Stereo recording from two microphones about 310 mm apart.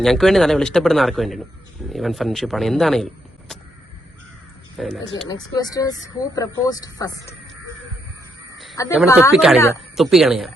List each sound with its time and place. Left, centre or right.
0.0 s speech: centre
4.8 s speech: centre
5.3 s speech: centre
8.8 s speech: centre
9.3 s speech: centre